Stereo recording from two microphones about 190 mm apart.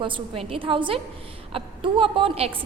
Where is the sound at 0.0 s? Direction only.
30° right (ahead or behind).